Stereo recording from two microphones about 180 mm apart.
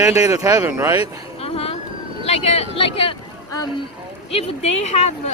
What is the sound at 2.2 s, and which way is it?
Speech, 35° left (ahead or behind).